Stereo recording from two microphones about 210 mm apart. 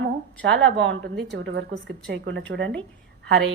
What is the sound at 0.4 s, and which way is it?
A woman's voice, 60° right (ahead or behind).